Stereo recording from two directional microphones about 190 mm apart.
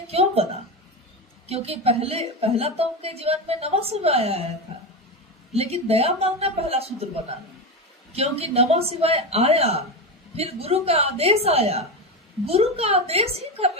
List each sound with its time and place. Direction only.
0.1 s a sound: 30° right (ahead or behind)
1.5 s a woman's voice: 30° right (ahead or behind)
5.5 s a woman's voice: 35° right (ahead or behind)